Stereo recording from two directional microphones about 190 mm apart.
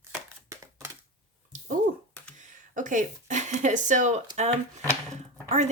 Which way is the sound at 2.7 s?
45° right (ahead or behind).